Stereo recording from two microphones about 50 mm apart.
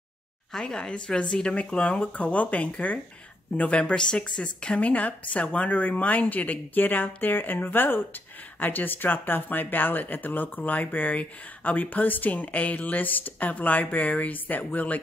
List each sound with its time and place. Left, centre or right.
0.5 s a woman's voice: centre; by 15.0 s left